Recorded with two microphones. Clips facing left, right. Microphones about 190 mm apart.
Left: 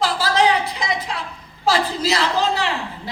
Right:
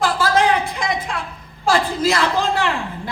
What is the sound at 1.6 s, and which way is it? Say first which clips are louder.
A woman's voice: right 2 dB; 50° right (ahead or behind).